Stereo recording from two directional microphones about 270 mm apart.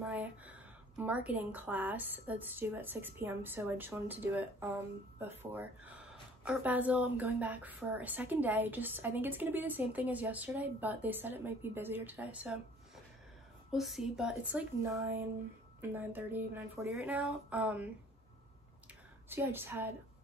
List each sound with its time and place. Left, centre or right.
0.0 s speech: centre
19.2 s speech: centre